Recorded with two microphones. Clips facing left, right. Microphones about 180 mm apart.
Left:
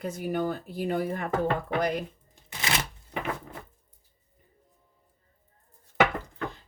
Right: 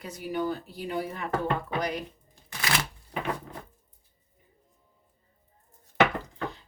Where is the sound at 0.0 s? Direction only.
50° left (ahead or behind).